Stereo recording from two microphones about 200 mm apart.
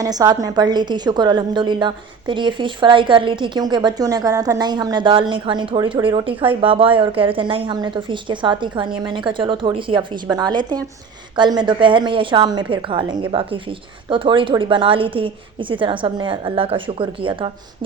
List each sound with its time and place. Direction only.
0.0 s a woman's voice: 20° right (ahead or behind)